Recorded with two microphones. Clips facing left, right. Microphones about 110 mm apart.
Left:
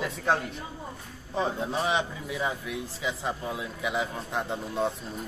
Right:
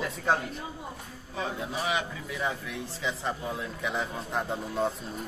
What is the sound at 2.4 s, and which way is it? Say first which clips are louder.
A man's voice: left 1 dB; 10° left (ahead or behind).